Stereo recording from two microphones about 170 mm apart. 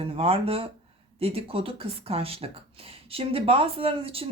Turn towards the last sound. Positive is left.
turn(degrees=-35)  # may be behind; listen again after turning